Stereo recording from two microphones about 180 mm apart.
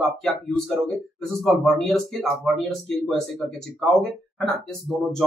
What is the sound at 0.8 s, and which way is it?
Speech, centre (ahead or behind).